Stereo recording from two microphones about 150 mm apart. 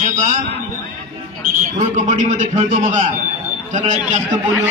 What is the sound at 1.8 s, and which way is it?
Music, 55° right (ahead or behind).